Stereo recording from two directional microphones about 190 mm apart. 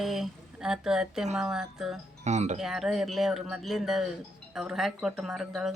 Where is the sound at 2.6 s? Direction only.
Centre (ahead or behind).